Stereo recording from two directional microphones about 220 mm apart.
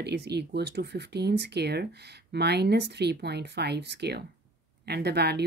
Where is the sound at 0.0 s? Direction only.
50° right (ahead or behind).